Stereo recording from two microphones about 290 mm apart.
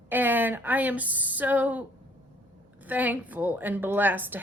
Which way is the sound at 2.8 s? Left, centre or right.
Centre.